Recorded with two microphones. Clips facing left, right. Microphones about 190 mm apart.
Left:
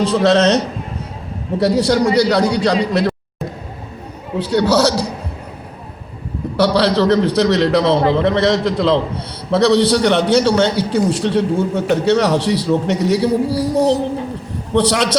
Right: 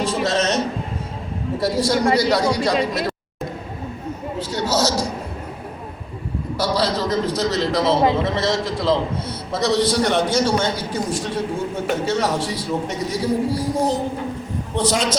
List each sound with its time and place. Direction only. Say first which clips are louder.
0.0 s a man's voice: left 8 dB; 65° left (ahead or behind)
4.4 s a man's voice: left 8 dB; 65° left (ahead or behind)
6.6 s a man's voice: left 7 dB; 65° left (ahead or behind)